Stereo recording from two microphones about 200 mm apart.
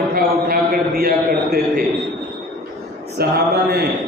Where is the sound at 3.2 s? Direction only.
50° right (ahead or behind).